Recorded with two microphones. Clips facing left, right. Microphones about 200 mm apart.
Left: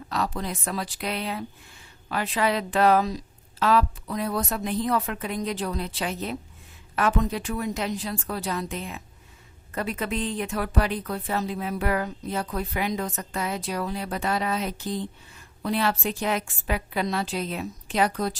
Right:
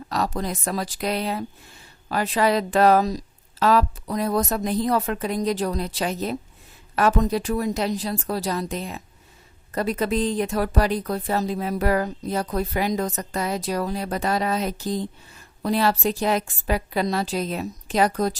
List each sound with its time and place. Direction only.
0.1 s speech: 40° right (ahead or behind)